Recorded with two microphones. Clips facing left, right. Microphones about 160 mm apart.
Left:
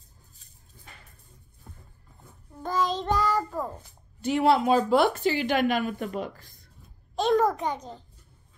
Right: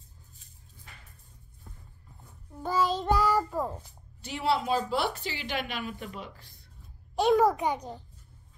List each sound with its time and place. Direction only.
2.6 s child singing: 10° right (ahead or behind)
4.2 s a woman's voice: 50° left (ahead or behind)
7.2 s a child's voice: 15° right (ahead or behind)